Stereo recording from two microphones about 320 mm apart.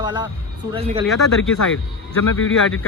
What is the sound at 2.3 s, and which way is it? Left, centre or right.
Speech, left.